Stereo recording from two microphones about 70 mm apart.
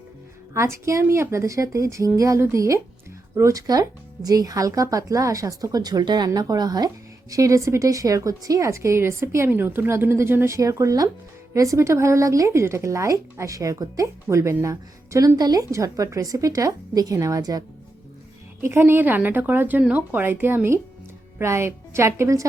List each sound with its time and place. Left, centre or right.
0.5 s speech: right
3.7 s speech: right
9.5 s a woman's voice: right
15.4 s speech: right
15.7 s speech: right
18.6 s a woman's voice: right